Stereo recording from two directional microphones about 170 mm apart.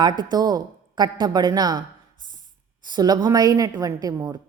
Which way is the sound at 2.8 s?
25° right (ahead or behind).